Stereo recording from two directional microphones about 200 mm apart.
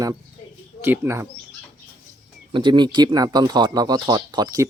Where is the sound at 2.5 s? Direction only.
20° right (ahead or behind).